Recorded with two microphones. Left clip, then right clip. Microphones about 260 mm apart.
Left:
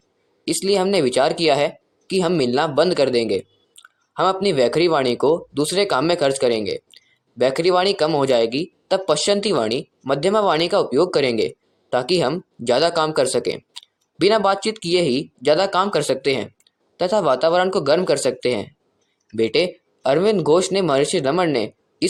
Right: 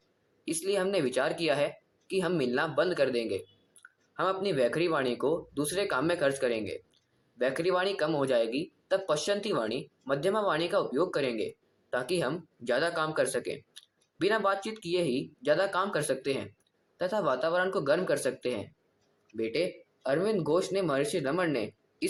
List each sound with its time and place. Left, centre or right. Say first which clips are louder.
0.4 s speech: left 11 dB; left
13.7 s tick: left 12 dB; left
15.4 s speech: left 10 dB; left